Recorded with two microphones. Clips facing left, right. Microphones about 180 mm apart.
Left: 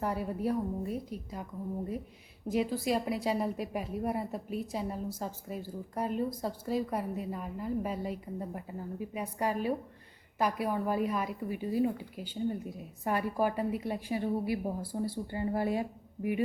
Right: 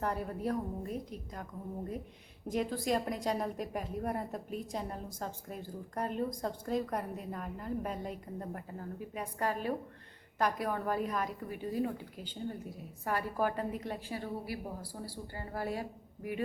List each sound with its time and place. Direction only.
0.0 s a woman's voice: 5° left (ahead or behind)
2.5 s a woman's voice: 5° left (ahead or behind)